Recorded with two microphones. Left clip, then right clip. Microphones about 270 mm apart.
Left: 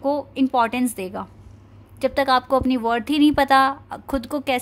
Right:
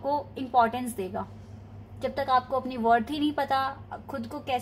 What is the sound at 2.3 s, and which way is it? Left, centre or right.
Speech, left.